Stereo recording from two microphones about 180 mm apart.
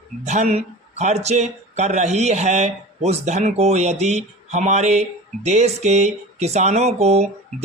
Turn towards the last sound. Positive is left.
turn(degrees=-35)  # may be behind; listen again after turning